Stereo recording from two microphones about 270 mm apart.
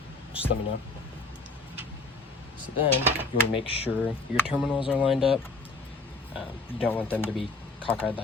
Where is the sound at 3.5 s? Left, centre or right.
Left.